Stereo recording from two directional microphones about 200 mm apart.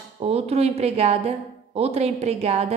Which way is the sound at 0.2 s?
30° right (ahead or behind).